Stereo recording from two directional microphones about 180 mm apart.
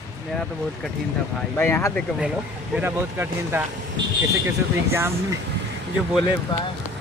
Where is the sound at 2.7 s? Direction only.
10° right (ahead or behind).